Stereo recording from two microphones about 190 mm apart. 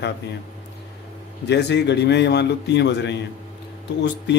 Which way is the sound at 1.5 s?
65° left (ahead or behind).